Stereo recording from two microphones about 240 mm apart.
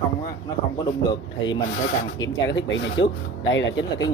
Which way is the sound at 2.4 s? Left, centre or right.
Left.